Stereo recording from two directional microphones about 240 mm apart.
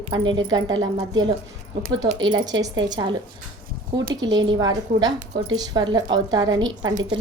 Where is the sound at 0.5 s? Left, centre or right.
Centre.